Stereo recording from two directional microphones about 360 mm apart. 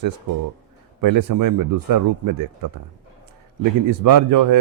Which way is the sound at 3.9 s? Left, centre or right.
Right.